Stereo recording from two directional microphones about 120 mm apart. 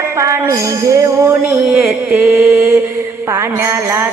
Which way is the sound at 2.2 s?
20° right (ahead or behind).